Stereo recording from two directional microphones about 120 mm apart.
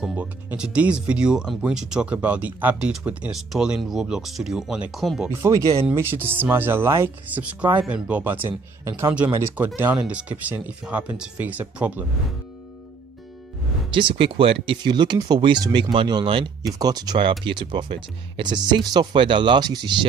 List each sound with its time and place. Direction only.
0.0 s speech: 10° right (ahead or behind)
5.3 s speech: 25° right (ahead or behind)
13.9 s speech: 45° right (ahead or behind)
16.6 s speech: 30° right (ahead or behind)